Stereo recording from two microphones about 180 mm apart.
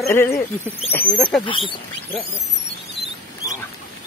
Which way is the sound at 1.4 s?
30° left (ahead or behind).